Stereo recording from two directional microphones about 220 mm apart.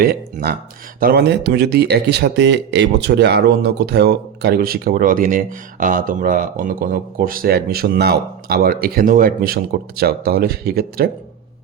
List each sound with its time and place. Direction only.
0.0 s speech: 45° right (ahead or behind)